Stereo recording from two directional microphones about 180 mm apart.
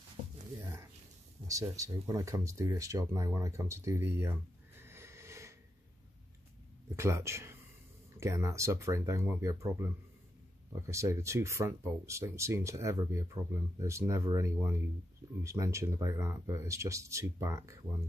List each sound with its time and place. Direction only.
1.5 s speech: 20° right (ahead or behind)
7.0 s speech: 15° right (ahead or behind)